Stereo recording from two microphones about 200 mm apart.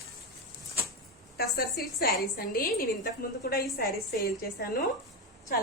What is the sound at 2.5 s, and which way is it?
A woman's voice, 45° left (ahead or behind).